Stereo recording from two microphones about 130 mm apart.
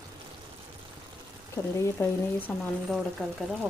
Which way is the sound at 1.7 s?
20° left (ahead or behind).